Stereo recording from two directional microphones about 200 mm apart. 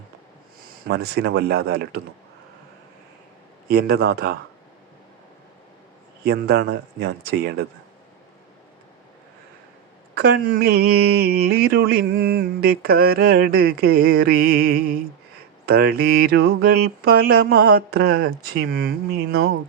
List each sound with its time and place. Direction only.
0.9 s speech: 55° right (ahead or behind)
3.7 s speech: 50° right (ahead or behind)
6.2 s speech: 50° right (ahead or behind)
10.2 s speech: 50° right (ahead or behind)